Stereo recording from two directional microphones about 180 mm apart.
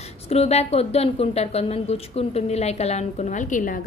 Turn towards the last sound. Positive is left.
turn(degrees=45)  # may be behind; listen again after turning